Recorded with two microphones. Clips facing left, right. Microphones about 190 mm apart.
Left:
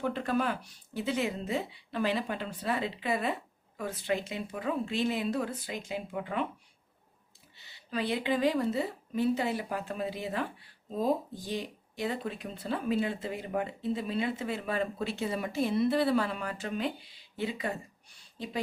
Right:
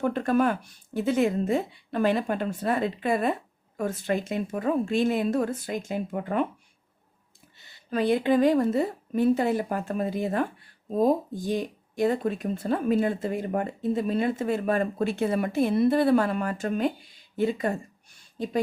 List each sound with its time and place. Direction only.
0.0 s a woman's voice: 50° right (ahead or behind)
7.6 s a woman's voice: 50° right (ahead or behind)